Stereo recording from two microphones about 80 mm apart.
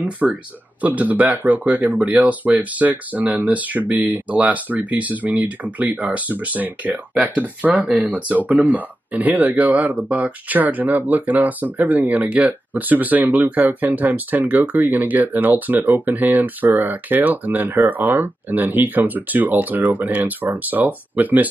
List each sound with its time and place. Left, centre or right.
0.0 s speech: centre